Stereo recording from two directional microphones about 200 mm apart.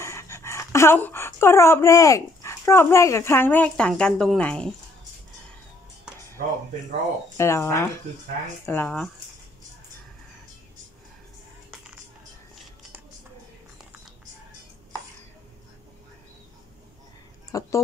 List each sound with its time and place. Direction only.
0.0 s speech: 15° left (ahead or behind)
7.3 s speech: 15° left (ahead or behind)
17.5 s a sound: 15° left (ahead or behind)